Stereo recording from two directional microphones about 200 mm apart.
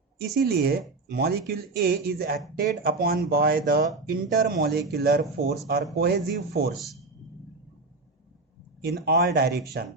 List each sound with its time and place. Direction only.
0.3 s speech: 50° right (ahead or behind)
6.7 s speech: centre (ahead or behind)
9.0 s speech: 55° right (ahead or behind)